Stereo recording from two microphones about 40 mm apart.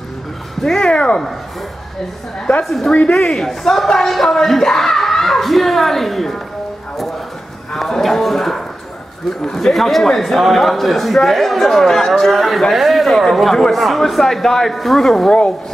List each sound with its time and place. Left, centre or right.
0.6 s speech: centre
0.8 s speech: left
2.6 s a man's voice: centre
2.9 s a woman's voice: left
3.3 s speech: centre
7.7 s a sound: centre
9.4 s a man's voice: centre